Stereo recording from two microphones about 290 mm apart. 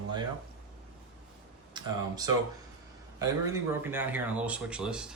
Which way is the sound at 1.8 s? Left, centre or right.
Centre.